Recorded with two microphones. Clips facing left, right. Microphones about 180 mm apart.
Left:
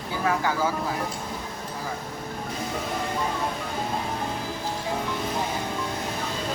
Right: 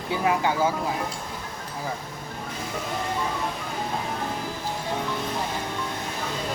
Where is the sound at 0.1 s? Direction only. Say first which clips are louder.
Right 2 dB; 20° right (ahead or behind).